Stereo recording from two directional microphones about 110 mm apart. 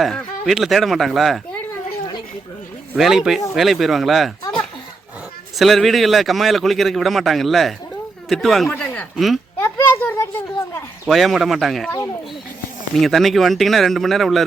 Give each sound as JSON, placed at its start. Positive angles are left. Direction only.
{"t": 0.0, "sound": "a man's voice", "side_deg": 0}
{"t": 2.9, "sound": "a man's voice", "side_deg": 0}
{"t": 5.5, "sound": "a man's voice", "side_deg": 0}
{"t": 8.7, "sound": "a sound", "side_deg": 15}
{"t": 9.1, "sound": "a man's voice", "side_deg": 0}
{"t": 9.6, "sound": "a sound", "side_deg": 25}
{"t": 11.0, "sound": "a man's voice", "side_deg": 0}
{"t": 12.9, "sound": "a man's voice", "side_deg": 0}